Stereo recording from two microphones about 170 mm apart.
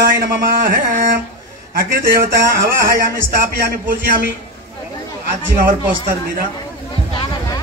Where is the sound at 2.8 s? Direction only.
60° right (ahead or behind).